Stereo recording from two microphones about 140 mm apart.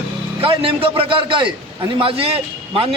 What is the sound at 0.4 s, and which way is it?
A man's voice, 40° right (ahead or behind).